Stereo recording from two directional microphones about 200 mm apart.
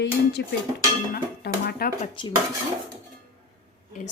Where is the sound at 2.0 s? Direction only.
25° left (ahead or behind).